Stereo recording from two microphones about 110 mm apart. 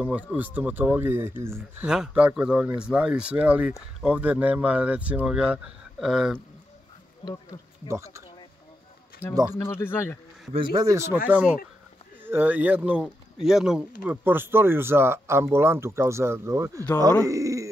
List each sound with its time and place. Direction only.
0.0 s speech: 10° right (ahead or behind)
1.9 s speech: 10° right (ahead or behind)
7.2 s speech: 45° left (ahead or behind)
9.5 s speech: 20° left (ahead or behind)
10.5 s speech: 50° right (ahead or behind)
10.8 s speech: 25° right (ahead or behind)
13.0 s speech: 5° right (ahead or behind)
14.2 s speech: 20° right (ahead or behind)
17.3 s a sound: 30° right (ahead or behind)